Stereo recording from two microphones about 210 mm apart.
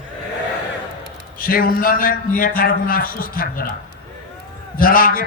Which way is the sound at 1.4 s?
45° left (ahead or behind).